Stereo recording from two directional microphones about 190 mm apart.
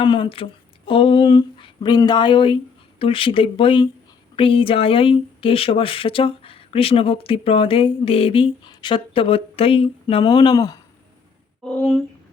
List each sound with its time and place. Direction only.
0.0 s speech: 25° left (ahead or behind)
11.6 s speech: 5° left (ahead or behind)